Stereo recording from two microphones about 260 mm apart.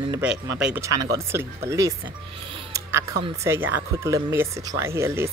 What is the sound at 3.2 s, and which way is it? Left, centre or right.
Speech, centre.